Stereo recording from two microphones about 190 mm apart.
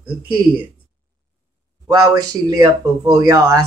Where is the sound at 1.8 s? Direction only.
15° right (ahead or behind).